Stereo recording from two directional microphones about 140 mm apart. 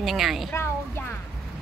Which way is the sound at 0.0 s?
Centre (ahead or behind).